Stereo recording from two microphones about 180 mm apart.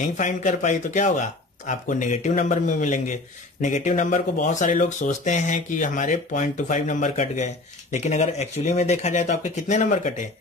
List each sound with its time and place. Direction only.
0.0 s speech: 45° left (ahead or behind)